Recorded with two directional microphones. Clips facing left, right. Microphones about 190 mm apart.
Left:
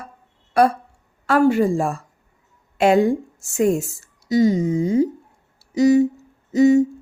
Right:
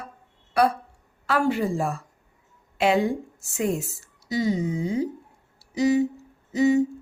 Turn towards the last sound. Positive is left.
turn(degrees=45)  # may be behind; listen again after turning